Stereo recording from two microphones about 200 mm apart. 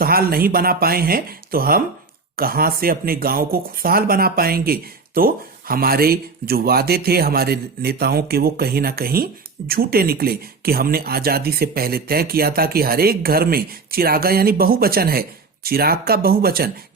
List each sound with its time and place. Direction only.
0.0 s speech: 50° right (ahead or behind)